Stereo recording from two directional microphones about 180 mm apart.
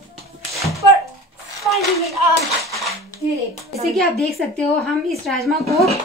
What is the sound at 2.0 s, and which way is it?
Speech, 35° right (ahead or behind).